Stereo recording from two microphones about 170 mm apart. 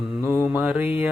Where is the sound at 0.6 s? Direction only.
10° right (ahead or behind).